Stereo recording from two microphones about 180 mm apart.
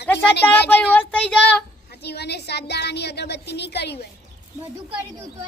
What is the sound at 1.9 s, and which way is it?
A woman's voice, 65° left (ahead or behind).